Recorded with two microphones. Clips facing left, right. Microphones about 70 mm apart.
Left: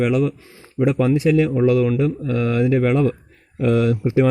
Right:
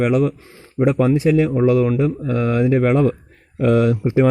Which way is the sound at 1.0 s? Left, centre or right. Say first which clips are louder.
Even; right.